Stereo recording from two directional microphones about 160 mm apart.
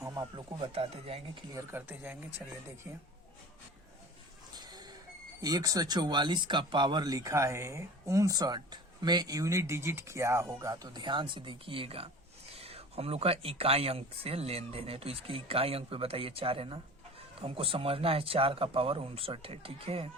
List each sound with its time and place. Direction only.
0.0 s speech: 20° right (ahead or behind)
1.5 s speech: 15° right (ahead or behind)
4.5 s a sound: 25° right (ahead or behind)
5.4 s speech: 25° right (ahead or behind)